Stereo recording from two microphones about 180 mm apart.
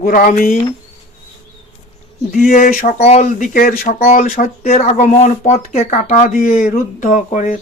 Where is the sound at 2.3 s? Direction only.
50° left (ahead or behind).